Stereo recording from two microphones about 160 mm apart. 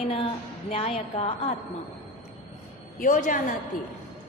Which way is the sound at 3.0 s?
55° left (ahead or behind).